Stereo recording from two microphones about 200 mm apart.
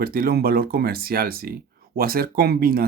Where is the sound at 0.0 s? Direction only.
50° right (ahead or behind).